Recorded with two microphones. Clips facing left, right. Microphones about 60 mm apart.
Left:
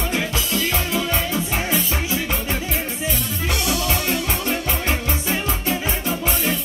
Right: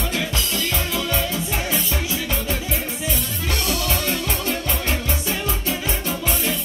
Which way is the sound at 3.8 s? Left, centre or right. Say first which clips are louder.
Left 1 dB; left.